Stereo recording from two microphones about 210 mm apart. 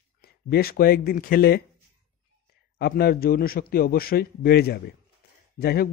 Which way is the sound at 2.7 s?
50° left (ahead or behind).